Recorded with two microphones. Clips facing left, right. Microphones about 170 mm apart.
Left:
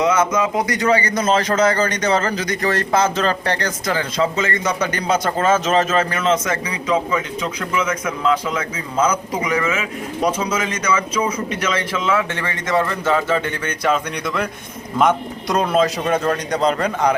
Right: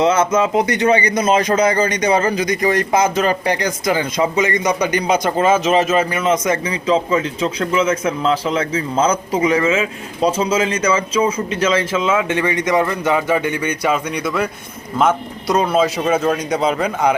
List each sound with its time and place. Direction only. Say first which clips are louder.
0.0 s a man's voice: right 2 dB; 30° right (ahead or behind); by 17.2 s 5° right (ahead or behind)